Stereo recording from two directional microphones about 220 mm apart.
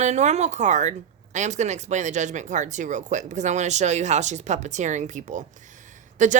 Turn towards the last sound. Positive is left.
turn(degrees=-35)  # may be behind; listen again after turning